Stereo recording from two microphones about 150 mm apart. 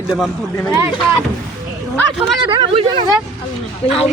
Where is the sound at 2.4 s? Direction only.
35° right (ahead or behind).